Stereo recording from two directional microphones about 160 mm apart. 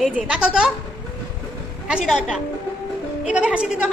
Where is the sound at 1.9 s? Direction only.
5° right (ahead or behind).